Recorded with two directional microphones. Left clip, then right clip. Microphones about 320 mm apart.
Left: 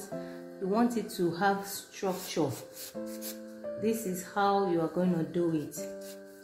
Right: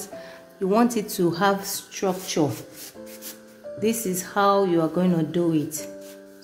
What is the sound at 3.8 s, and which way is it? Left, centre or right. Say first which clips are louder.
A woman's voice: right 8 dB; right.